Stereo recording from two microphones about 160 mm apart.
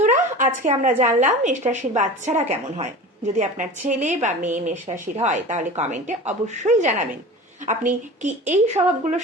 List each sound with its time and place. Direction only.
0.3 s speech: 50° right (ahead or behind)